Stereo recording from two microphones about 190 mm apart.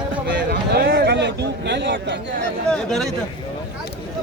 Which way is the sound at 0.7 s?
55° right (ahead or behind).